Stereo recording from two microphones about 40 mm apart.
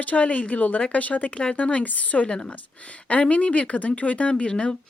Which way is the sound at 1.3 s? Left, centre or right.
Left.